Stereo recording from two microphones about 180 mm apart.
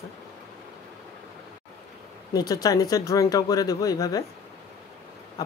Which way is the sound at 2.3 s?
20° left (ahead or behind).